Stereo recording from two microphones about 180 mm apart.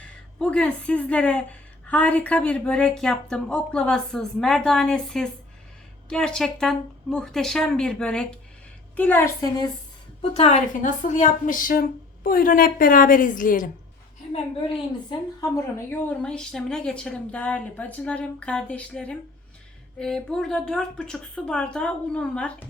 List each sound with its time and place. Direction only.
0.0 s a woman's voice: 5° left (ahead or behind)
10.2 s a woman's voice: 35° left (ahead or behind)
15.4 s a woman's voice: 15° left (ahead or behind)